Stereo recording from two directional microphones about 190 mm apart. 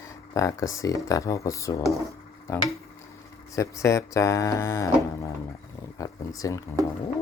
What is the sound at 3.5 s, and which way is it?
Speech, 15° left (ahead or behind).